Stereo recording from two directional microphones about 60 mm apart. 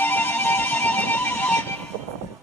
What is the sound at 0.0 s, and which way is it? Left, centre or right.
Music, left.